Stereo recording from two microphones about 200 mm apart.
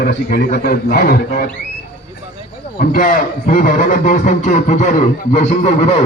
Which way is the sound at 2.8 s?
45° left (ahead or behind).